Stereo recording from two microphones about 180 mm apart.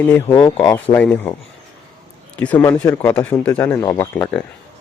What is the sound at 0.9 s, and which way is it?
A man's voice, 10° left (ahead or behind).